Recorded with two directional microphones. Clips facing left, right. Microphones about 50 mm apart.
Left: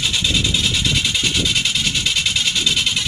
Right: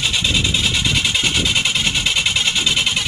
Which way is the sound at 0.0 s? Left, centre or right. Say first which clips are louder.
Right 1 dB; centre.